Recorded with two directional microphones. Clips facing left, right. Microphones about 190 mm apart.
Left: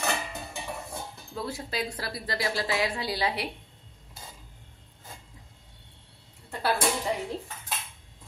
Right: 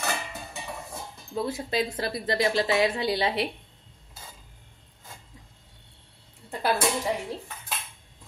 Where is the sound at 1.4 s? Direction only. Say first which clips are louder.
Right 5 dB; 20° right (ahead or behind).